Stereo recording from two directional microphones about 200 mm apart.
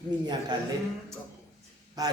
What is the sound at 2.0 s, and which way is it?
Speech, 20° right (ahead or behind).